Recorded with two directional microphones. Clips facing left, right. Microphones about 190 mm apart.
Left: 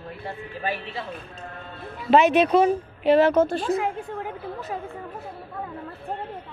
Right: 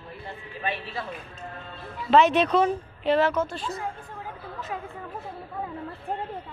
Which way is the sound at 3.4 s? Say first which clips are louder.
Left 8 dB; 60° left (ahead or behind).